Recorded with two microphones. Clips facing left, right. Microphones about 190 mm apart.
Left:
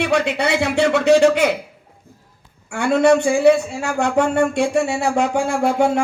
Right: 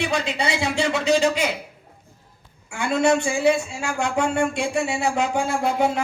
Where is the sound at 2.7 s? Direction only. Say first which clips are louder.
Left 5 dB; 60° left (ahead or behind).